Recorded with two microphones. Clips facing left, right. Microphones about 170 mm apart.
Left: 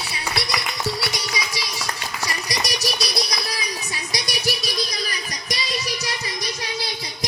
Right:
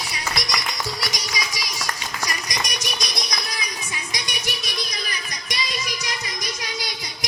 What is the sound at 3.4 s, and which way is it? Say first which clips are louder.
Music: left 3 dB; 35° left (ahead or behind).